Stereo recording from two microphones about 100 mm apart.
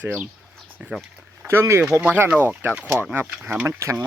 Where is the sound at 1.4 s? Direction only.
25° right (ahead or behind).